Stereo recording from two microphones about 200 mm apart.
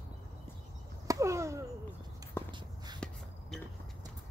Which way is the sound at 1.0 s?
15° right (ahead or behind).